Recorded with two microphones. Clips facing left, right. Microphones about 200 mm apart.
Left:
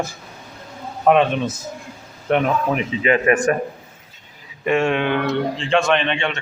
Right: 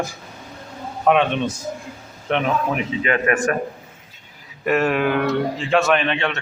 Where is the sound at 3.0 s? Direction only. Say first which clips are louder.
Left 4 dB; 25° left (ahead or behind).